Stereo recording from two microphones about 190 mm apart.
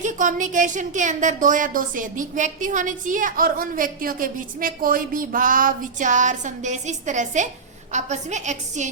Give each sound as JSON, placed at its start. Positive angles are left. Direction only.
{"t": 0.0, "sound": "a woman's voice", "side_deg": -40}